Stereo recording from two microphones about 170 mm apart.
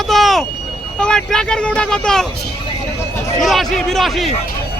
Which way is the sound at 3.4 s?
Centre (ahead or behind).